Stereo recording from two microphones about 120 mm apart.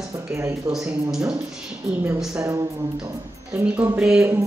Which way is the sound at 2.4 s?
30° right (ahead or behind).